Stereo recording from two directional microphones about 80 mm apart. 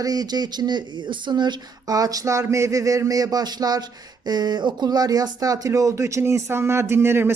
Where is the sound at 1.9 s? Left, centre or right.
Right.